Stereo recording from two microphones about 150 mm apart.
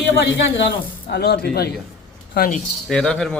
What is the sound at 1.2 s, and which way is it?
Speech, 90° left.